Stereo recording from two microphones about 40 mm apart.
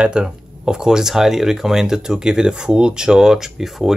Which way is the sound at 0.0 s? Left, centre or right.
Right.